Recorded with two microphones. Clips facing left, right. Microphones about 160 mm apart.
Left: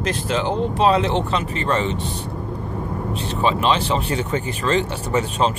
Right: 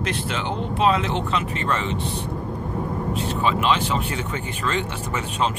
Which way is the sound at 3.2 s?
30° left (ahead or behind).